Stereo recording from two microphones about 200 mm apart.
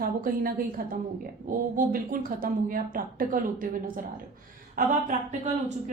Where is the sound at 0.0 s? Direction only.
45° right (ahead or behind).